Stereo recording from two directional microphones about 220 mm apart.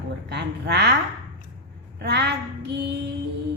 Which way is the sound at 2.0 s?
50° right (ahead or behind).